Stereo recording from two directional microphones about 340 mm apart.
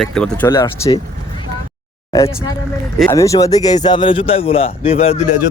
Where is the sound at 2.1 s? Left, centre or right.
Centre.